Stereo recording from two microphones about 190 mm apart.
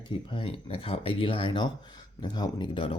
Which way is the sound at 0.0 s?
25° left (ahead or behind).